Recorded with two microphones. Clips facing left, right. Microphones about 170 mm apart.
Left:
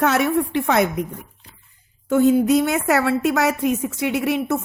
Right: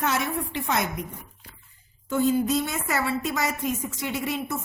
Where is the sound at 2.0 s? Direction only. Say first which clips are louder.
Left 7 dB; 60° left (ahead or behind).